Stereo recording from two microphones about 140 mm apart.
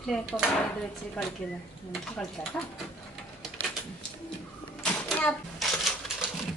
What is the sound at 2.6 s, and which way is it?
Speech, 10° left (ahead or behind).